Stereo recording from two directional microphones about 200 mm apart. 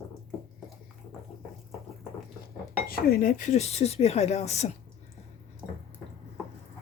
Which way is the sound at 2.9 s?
45° left (ahead or behind).